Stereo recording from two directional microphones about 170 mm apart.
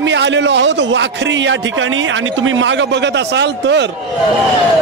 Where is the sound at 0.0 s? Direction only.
90° right.